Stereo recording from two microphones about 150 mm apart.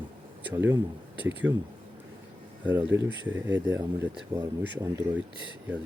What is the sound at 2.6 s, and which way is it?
Speech, 15° right (ahead or behind).